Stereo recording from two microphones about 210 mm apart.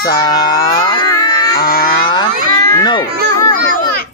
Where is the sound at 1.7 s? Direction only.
45° left (ahead or behind).